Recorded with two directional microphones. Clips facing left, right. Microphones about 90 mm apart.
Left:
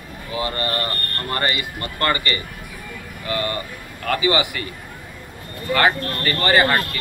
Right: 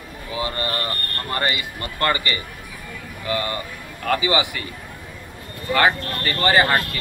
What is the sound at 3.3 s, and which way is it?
A man's voice, 20° right (ahead or behind).